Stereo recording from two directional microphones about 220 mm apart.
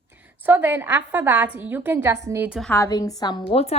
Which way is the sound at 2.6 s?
10° left (ahead or behind).